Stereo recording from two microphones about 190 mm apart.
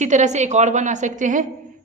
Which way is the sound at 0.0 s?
40° right (ahead or behind).